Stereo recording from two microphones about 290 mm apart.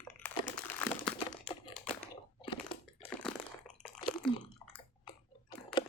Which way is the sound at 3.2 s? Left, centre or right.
Centre.